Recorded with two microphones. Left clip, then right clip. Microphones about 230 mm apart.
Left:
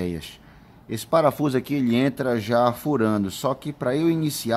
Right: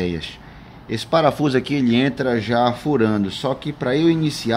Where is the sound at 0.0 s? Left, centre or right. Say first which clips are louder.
Right 5 dB; left.